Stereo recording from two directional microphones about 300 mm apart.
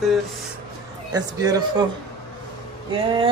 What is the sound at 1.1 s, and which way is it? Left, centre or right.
Speech, centre.